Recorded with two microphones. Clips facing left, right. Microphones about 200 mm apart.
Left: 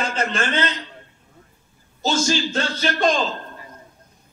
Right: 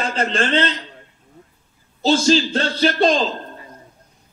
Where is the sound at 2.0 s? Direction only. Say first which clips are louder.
Right 6 dB; 35° right (ahead or behind).